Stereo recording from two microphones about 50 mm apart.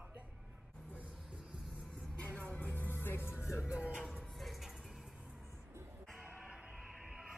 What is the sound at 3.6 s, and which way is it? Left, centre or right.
Music, centre.